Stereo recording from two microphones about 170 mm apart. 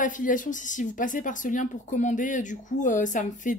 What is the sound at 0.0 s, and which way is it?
Speech, 50° left (ahead or behind).